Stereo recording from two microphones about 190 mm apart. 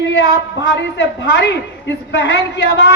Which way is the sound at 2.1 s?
65° left (ahead or behind).